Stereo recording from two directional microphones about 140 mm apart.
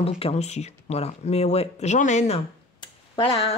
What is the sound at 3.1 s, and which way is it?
Speech, 40° left (ahead or behind).